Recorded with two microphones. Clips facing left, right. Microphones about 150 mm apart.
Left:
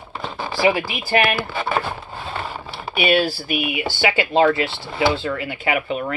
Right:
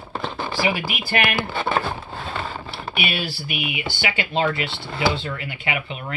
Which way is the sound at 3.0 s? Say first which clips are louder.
Left 13 dB; 40° left (ahead or behind).